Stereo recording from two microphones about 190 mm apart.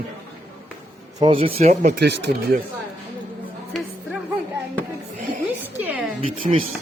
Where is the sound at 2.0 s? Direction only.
65° right (ahead or behind).